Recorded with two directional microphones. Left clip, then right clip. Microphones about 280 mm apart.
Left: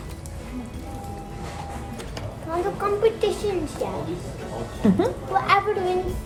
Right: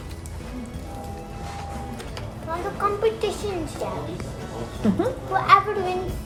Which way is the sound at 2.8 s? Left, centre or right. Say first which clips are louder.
Left 1 dB; centre.